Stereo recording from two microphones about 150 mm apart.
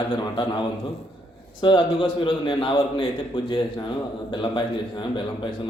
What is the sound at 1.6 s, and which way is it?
A man's voice, 35° left (ahead or behind).